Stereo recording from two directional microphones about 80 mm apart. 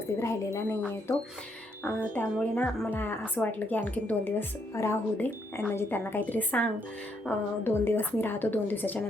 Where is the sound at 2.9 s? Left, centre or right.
Left.